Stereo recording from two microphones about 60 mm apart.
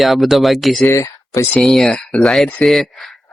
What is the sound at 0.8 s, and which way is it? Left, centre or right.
Speech, left.